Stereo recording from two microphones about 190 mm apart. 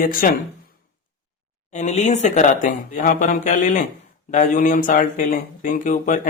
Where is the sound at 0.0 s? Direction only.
45° left (ahead or behind).